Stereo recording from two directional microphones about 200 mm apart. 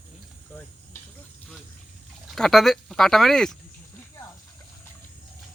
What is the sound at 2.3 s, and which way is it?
Speech, centre (ahead or behind).